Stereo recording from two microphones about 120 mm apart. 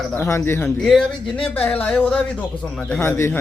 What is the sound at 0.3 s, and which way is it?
Speech, 20° left (ahead or behind).